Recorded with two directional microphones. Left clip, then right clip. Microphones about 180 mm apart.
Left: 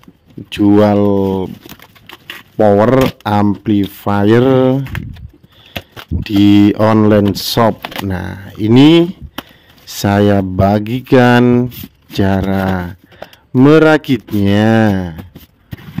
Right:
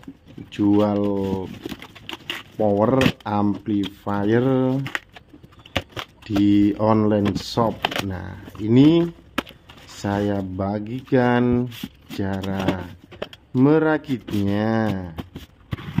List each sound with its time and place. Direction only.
0.5 s speech: 45° left (ahead or behind)
2.5 s speech: 50° left (ahead or behind)
6.2 s speech: 50° left (ahead or behind)
11.4 s speech: 40° left (ahead or behind)
12.2 s speech: 55° left (ahead or behind)